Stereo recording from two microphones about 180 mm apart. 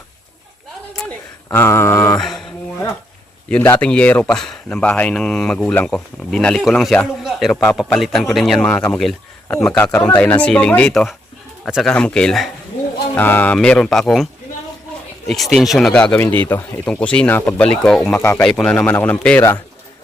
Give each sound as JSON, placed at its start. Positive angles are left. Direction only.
{"t": 0.9, "sound": "a sound", "side_deg": 10}
{"t": 2.1, "sound": "mantra", "side_deg": 0}
{"t": 3.5, "sound": "speech", "side_deg": 10}
{"t": 15.5, "sound": "speech", "side_deg": 0}
{"t": 18.2, "sound": "speech", "side_deg": 15}